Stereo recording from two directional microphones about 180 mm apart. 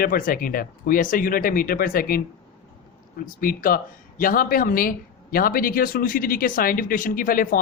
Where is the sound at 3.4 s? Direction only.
50° left (ahead or behind).